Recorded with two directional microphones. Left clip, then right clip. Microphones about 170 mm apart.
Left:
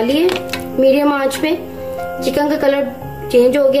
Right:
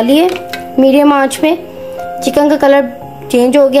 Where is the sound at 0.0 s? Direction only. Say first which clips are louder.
Right 5 dB; 45° right (ahead or behind).